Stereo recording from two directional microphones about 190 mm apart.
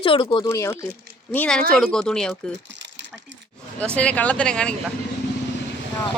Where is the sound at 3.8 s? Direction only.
5° left (ahead or behind).